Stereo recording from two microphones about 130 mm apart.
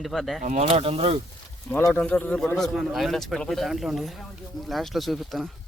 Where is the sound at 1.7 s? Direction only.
15° left (ahead or behind); by 5.5 s centre (ahead or behind).